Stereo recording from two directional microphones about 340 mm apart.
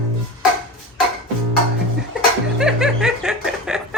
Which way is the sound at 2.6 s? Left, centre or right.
Centre.